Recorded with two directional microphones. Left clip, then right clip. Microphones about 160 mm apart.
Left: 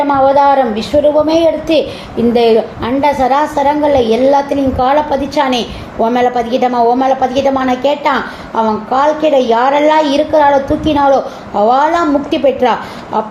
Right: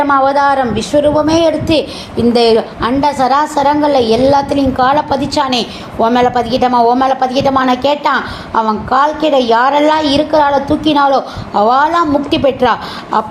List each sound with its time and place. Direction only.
0.1 s a woman's voice: 45° right (ahead or behind)